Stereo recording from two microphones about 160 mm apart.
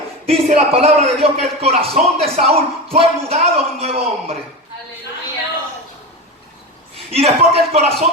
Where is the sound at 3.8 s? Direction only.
40° right (ahead or behind).